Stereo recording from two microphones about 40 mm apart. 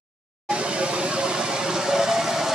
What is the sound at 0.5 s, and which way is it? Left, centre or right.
Vehicle, right.